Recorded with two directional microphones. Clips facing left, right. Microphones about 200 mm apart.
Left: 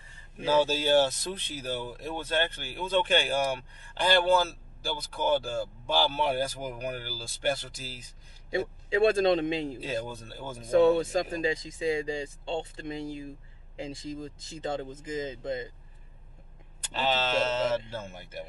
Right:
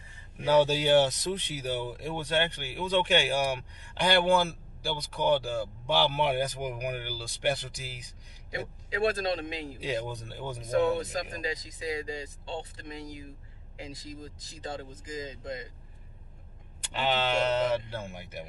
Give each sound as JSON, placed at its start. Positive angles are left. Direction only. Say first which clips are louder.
{"t": 0.5, "sound": "speech", "louder": "right 2 dB", "side_deg": -15}
{"t": 8.5, "sound": "speech", "louder": "left 7 dB", "side_deg": 25}
{"t": 9.8, "sound": "speech", "louder": "right 1 dB", "side_deg": -15}
{"t": 10.7, "sound": "speech", "louder": "left 5 dB", "side_deg": 25}
{"t": 16.9, "sound": "speech", "louder": "even", "side_deg": -15}